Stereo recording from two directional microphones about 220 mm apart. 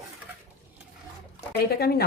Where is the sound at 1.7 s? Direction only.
45° left (ahead or behind).